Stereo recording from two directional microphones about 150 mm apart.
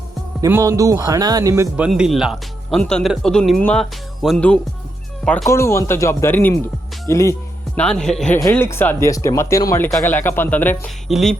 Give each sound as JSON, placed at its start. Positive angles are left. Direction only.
{"t": 0.4, "sound": "speech", "side_deg": -20}
{"t": 1.7, "sound": "speech", "side_deg": -5}
{"t": 5.5, "sound": "speech", "side_deg": 20}
{"t": 7.8, "sound": "speech", "side_deg": 5}
{"t": 8.4, "sound": "speech", "side_deg": 15}
{"t": 11.1, "sound": "speech", "side_deg": 0}